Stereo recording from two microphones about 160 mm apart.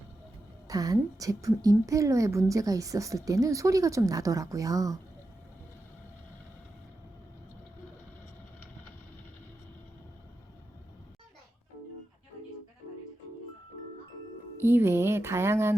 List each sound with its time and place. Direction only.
0.7 s a woman's voice: 20° right (ahead or behind)
14.6 s speech: 15° right (ahead or behind)